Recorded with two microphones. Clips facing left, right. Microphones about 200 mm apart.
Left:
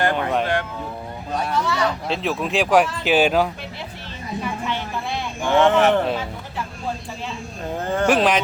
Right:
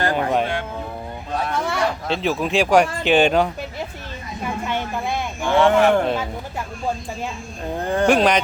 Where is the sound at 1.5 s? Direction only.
55° right (ahead or behind).